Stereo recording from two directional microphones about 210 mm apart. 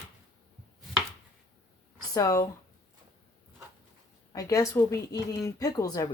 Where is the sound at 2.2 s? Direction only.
15° left (ahead or behind).